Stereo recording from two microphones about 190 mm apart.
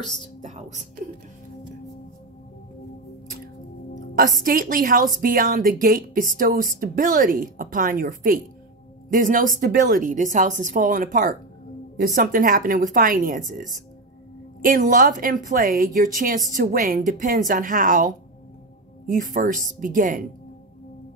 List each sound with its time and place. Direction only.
0.0 s speech: centre (ahead or behind)
0.4 s whispering: 35° right (ahead or behind)
4.1 s a woman's voice: 50° right (ahead or behind)